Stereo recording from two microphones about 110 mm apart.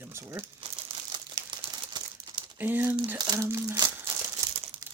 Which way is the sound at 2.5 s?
20° right (ahead or behind).